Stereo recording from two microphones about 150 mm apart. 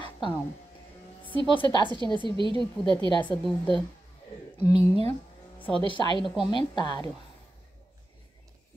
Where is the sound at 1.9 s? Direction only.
30° right (ahead or behind).